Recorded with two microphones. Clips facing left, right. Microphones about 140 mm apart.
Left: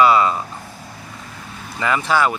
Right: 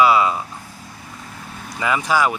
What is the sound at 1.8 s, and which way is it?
Speech, 10° right (ahead or behind).